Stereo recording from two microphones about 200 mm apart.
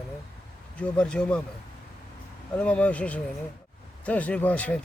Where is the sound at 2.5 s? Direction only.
5° left (ahead or behind).